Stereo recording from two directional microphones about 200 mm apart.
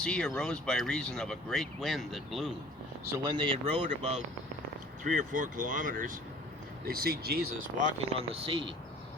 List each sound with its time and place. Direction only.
0.0 s speech: 5° left (ahead or behind)
3.2 s speech: 25° right (ahead or behind); by 7.9 s 50° right (ahead or behind)
7.9 s speech: 30° right (ahead or behind)